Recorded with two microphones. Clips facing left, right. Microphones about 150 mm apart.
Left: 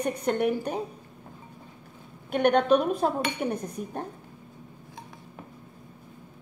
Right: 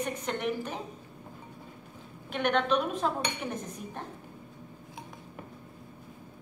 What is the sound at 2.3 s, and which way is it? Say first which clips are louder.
A woman's voice: left 6 dB; 45° left (ahead or behind).